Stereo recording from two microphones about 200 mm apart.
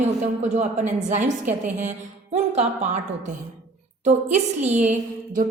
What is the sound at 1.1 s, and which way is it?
A woman's voice, 40° right (ahead or behind).